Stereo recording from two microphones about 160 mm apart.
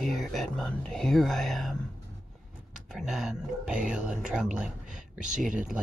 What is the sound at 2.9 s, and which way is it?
Speech, 5° right (ahead or behind).